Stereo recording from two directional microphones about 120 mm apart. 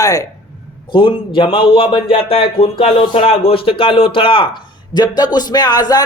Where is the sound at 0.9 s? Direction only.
45° left (ahead or behind).